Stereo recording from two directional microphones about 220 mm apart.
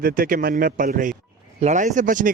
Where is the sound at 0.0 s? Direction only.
40° right (ahead or behind).